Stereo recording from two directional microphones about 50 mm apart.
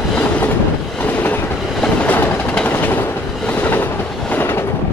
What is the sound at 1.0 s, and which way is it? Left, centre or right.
Train, left.